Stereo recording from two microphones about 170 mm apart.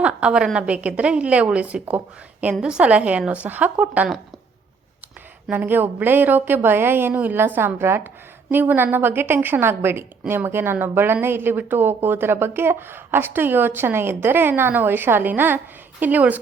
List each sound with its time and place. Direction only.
0.0 s a woman's voice: 5° right (ahead or behind)
5.5 s a woman's voice: 10° right (ahead or behind)